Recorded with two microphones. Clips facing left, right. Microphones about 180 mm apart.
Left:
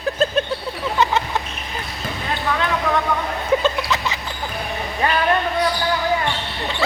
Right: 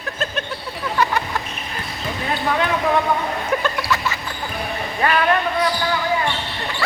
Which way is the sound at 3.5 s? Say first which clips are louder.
Left 4 dB; 20° left (ahead or behind).